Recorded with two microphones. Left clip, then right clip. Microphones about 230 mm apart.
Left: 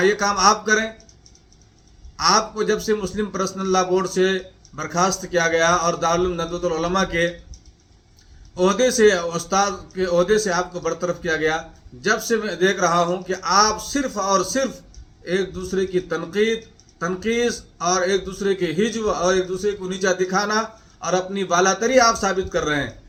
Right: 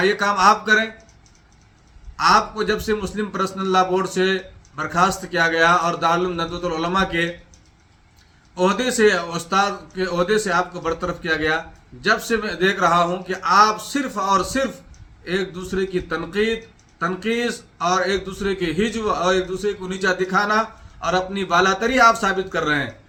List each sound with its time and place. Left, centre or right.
0.0 s a man's voice: centre
2.1 s a man's voice: centre
8.5 s a man's voice: centre